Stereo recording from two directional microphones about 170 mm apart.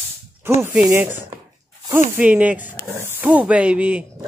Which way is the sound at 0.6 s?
10° right (ahead or behind).